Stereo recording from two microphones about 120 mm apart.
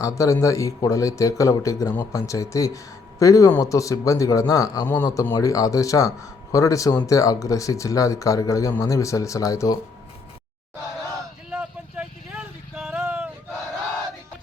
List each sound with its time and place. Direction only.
0.0 s speech: 25° left (ahead or behind)
11.5 s vehicle: 10° right (ahead or behind)
13.0 s a sound: 15° right (ahead or behind)